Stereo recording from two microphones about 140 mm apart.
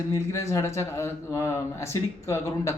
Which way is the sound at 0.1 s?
20° left (ahead or behind).